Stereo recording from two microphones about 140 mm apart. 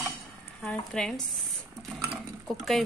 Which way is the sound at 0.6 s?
5° left (ahead or behind).